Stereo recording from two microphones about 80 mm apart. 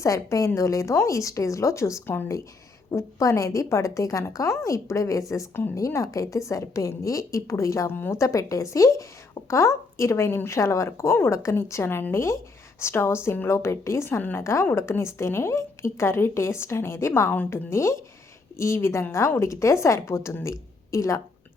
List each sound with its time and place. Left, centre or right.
0.0 s speech: left
2.0 s speech: left
2.9 s speech: left